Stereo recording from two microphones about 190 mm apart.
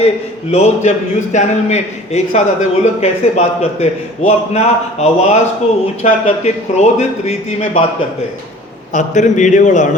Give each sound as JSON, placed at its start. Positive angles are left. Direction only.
{"t": 0.5, "sound": "a man's voice", "side_deg": 35}
{"t": 8.9, "sound": "a man's voice", "side_deg": 40}